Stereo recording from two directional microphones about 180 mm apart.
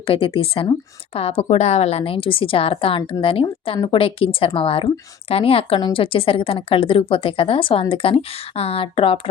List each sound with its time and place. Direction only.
0.0 s speech: 30° left (ahead or behind)